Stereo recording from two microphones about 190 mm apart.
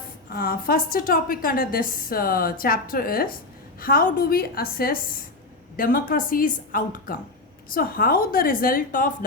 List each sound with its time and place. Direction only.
0.3 s a woman's voice: 55° left (ahead or behind)